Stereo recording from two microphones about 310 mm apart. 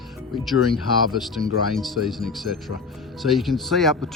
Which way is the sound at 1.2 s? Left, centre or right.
Centre.